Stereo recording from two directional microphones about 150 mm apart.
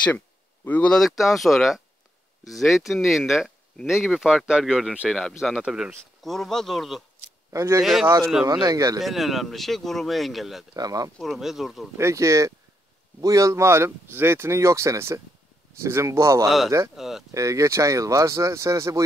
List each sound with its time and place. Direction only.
0.7 s speech: 10° left (ahead or behind)
7.5 s speech: 20° right (ahead or behind)
7.8 s speech: centre (ahead or behind)
8.5 s speech: 25° right (ahead or behind)
9.0 s speech: centre (ahead or behind)
10.7 s speech: 25° right (ahead or behind)
11.1 s speech: centre (ahead or behind)
12.0 s speech: 20° right (ahead or behind)
16.4 s speech: centre (ahead or behind)
17.3 s speech: 20° right (ahead or behind)